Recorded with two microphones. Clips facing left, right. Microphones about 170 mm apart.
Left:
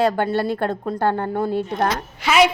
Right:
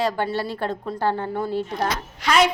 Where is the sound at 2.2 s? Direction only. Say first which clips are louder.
Left 2 dB; 5° left (ahead or behind).